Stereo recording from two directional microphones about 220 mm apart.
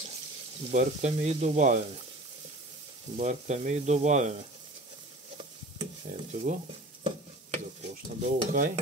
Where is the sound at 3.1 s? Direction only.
30° right (ahead or behind).